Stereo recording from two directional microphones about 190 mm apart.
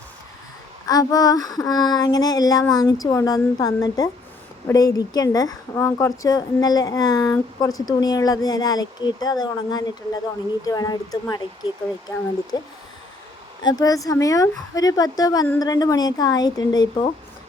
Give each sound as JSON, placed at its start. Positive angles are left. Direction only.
{"t": 0.9, "sound": "speech", "side_deg": 20}
{"t": 12.5, "sound": "speech", "side_deg": 20}